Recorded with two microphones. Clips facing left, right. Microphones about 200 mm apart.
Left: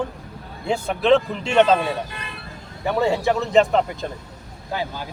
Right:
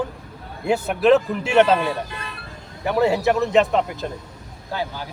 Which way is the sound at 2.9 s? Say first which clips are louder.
Right 2 dB; 5° right (ahead or behind).